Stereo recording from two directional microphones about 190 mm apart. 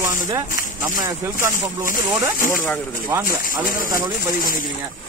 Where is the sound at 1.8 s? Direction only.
45° left (ahead or behind).